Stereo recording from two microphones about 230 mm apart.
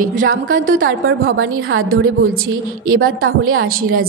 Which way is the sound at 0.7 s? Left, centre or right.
Right.